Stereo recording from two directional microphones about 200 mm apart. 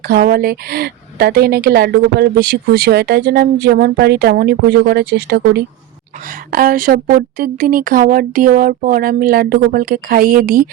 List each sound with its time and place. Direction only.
0.1 s speech: 50° right (ahead or behind)